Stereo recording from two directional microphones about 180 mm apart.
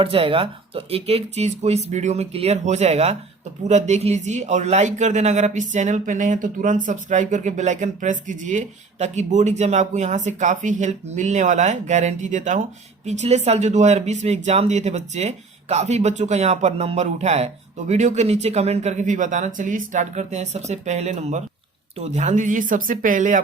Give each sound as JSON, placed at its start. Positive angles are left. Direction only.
{"t": 0.0, "sound": "speech", "side_deg": -30}